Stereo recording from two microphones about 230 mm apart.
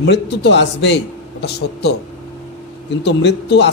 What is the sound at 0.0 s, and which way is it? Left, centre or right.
A man's voice, left.